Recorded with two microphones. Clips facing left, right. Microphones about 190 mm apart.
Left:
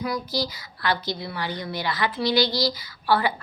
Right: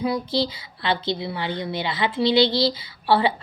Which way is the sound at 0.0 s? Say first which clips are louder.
Right 4 dB; 25° right (ahead or behind).